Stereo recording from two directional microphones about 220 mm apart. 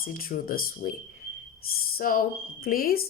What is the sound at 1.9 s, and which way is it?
Speech, 40° left (ahead or behind).